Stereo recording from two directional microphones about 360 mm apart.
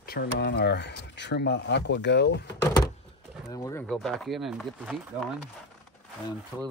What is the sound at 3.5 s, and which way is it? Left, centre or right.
Speech, centre.